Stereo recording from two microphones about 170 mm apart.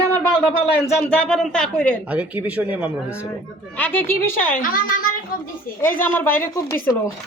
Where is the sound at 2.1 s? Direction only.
10° right (ahead or behind).